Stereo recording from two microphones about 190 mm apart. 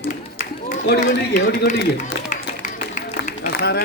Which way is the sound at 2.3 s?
40° left (ahead or behind).